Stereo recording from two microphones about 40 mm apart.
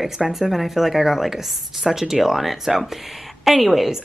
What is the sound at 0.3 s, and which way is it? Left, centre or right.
A woman's voice, centre.